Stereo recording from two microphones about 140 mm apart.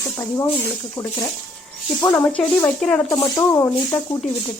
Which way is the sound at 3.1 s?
20° left (ahead or behind).